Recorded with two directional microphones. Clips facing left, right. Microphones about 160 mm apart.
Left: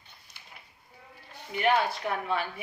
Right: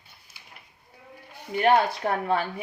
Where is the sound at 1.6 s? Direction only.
45° right (ahead or behind).